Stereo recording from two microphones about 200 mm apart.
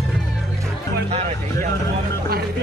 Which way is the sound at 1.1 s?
30° right (ahead or behind).